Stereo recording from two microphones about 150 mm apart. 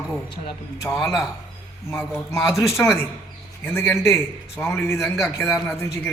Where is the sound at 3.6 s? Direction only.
15° left (ahead or behind).